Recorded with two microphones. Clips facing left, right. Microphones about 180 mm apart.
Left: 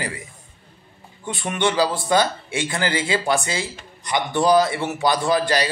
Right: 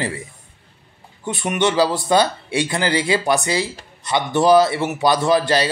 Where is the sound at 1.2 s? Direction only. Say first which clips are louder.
Right 3 dB; 20° right (ahead or behind).